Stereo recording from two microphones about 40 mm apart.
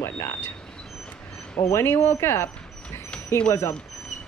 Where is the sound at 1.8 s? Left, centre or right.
Left.